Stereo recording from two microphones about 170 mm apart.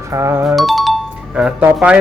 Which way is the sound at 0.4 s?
Centre (ahead or behind).